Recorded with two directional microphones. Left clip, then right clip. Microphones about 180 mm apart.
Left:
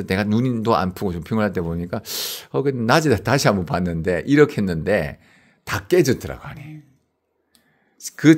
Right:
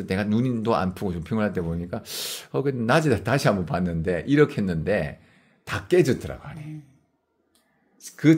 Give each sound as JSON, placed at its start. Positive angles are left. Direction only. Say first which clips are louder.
{"t": 0.0, "sound": "speech", "louder": "left 4 dB", "side_deg": 35}
{"t": 8.0, "sound": "speech", "louder": "left 5 dB", "side_deg": 40}